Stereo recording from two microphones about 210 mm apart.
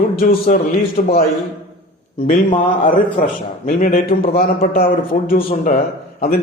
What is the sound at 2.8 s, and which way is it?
A man's voice, 40° left (ahead or behind).